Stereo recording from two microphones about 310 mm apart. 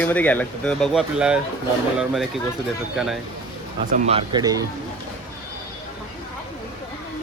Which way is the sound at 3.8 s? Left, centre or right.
Right.